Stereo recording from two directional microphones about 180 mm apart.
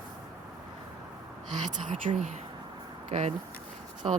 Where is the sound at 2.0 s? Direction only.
30° right (ahead or behind).